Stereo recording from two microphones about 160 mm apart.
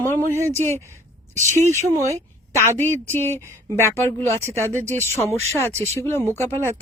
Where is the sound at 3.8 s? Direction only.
15° left (ahead or behind).